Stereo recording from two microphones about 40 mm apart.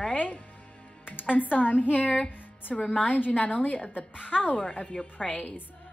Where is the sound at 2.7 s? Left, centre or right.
Left.